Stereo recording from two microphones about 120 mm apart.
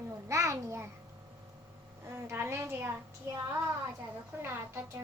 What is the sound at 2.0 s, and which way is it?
Speech, 20° right (ahead or behind).